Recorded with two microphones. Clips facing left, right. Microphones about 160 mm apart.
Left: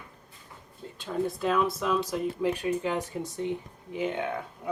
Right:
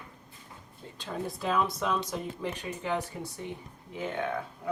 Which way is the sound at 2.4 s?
15° left (ahead or behind).